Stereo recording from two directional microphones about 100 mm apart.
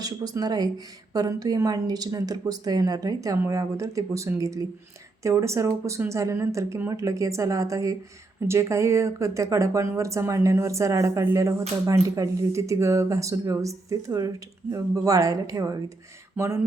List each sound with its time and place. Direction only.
0.0 s speech: 40° right (ahead or behind)
16.4 s speech: 20° right (ahead or behind)